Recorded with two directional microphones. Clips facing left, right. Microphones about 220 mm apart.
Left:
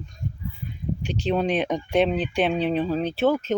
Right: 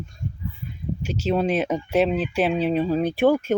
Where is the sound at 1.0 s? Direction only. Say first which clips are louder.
Right 1 dB; 5° right (ahead or behind).